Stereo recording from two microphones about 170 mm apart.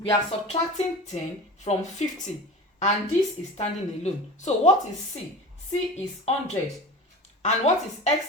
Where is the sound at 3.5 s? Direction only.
40° left (ahead or behind).